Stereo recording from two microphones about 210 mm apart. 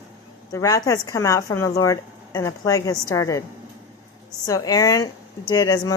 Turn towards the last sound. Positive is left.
turn(degrees=20)  # may be behind; listen again after turning